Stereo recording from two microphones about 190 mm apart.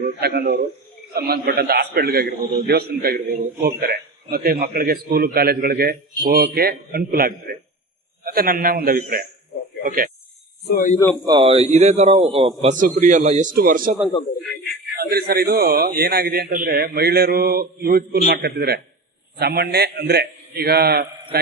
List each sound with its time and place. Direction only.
0.2 s a man's voice: 55° right (ahead or behind)
10.7 s a man's voice: 45° left (ahead or behind)
11.3 s a man's voice: 30° right (ahead or behind)
12.8 s a man's voice: 45° right (ahead or behind)
14.9 s a man's voice: 55° right (ahead or behind)